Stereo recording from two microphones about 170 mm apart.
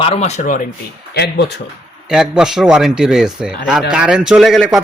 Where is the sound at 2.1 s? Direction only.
5° right (ahead or behind).